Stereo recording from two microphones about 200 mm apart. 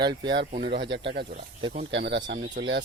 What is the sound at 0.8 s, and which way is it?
Speech, 60° right (ahead or behind).